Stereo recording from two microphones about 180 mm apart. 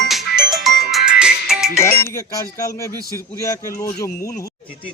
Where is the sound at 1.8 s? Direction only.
15° left (ahead or behind).